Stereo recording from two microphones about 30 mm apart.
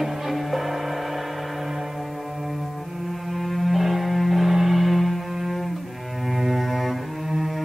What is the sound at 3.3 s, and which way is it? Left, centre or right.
Music, centre.